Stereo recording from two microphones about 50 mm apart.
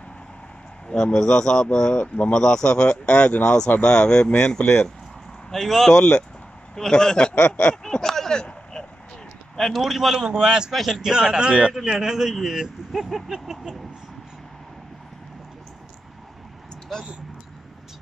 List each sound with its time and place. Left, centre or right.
1.0 s speech: centre
2.0 s speech: left
2.3 s speech: centre
9.6 s speech: centre
10.7 s a man's voice: centre
11.0 s speech: centre